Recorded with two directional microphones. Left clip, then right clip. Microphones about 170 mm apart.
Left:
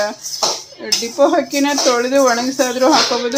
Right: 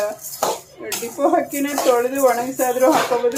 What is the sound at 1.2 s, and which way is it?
Speech, 35° left (ahead or behind).